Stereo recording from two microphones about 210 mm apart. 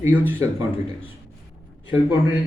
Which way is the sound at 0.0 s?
10° right (ahead or behind).